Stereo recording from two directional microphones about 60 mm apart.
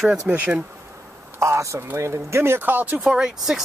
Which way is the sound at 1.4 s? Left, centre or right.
Right.